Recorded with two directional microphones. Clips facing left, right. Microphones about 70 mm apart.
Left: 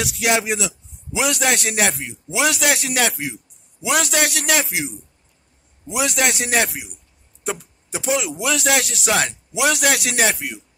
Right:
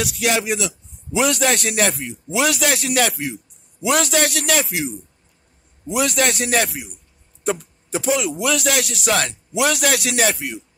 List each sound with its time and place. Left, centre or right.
0.0 s speech: left
1.1 s speech: centre
5.9 s speech: centre
7.9 s speech: centre
9.1 s speech: centre